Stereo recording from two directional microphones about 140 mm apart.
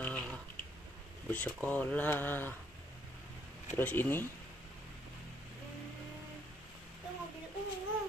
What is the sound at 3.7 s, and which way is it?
Speech, 15° left (ahead or behind).